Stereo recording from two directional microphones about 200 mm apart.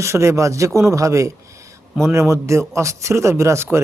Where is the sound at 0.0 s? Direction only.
15° right (ahead or behind).